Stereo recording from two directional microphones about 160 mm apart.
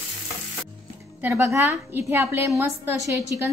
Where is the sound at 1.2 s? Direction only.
15° right (ahead or behind).